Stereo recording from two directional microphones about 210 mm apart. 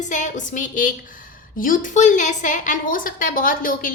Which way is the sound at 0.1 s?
35° left (ahead or behind).